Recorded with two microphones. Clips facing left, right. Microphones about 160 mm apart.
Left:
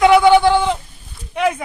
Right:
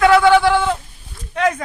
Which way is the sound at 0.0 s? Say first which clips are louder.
Left 1 dB; 15° left (ahead or behind).